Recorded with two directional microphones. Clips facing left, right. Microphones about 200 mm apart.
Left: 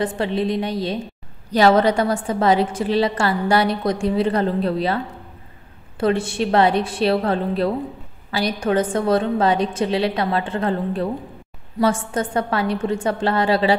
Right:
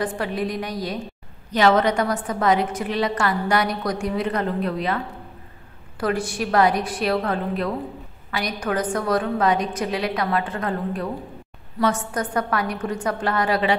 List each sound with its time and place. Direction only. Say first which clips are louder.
0.0 s a woman's voice: left 4 dB; 25° left (ahead or behind)